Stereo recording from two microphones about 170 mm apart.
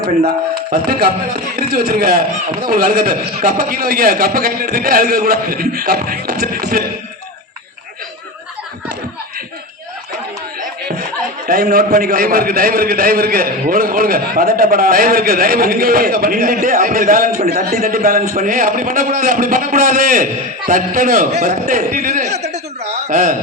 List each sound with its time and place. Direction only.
0.7 s a man's voice: 65° right (ahead or behind)
11.4 s a man's voice: 60° right (ahead or behind); by 22.4 s 40° right (ahead or behind)
22.5 s a sound: 40° right (ahead or behind)